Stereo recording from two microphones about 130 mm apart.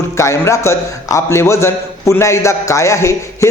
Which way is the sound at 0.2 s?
25° left (ahead or behind).